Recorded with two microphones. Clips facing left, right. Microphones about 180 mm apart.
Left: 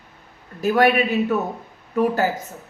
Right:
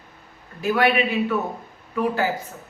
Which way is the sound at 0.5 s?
40° left (ahead or behind).